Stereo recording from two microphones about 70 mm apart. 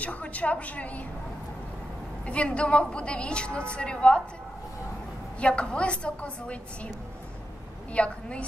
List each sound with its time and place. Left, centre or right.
0.0 s a woman's voice: left
2.2 s a woman's voice: centre
5.4 s a woman's voice: centre
7.9 s a woman's voice: centre